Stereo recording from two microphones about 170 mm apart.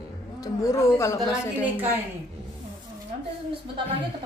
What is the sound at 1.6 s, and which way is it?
Speech, 10° right (ahead or behind).